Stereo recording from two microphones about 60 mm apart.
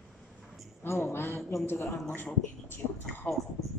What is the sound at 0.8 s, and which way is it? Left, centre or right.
Speech, left.